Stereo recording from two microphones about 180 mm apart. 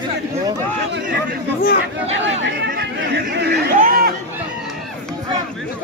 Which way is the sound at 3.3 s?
70° right (ahead or behind).